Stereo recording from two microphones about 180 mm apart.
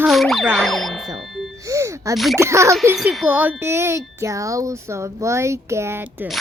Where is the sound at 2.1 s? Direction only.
Centre (ahead or behind).